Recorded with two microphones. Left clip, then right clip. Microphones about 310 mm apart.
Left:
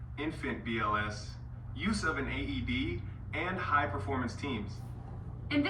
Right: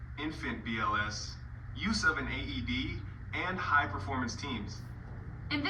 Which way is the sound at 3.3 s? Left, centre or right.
Right.